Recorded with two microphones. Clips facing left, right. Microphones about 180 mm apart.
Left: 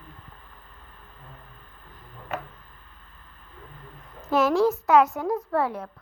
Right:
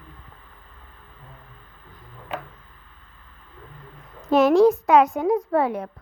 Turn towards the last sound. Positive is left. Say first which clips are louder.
# right 4 dB
turn(degrees=-15)  # may be behind; listen again after turning